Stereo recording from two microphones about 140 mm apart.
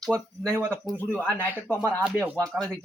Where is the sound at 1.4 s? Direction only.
15° right (ahead or behind).